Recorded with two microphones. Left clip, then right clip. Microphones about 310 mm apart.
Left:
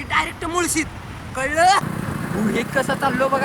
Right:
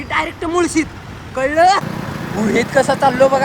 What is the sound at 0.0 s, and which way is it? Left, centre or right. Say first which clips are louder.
Speech: right 2 dB; centre.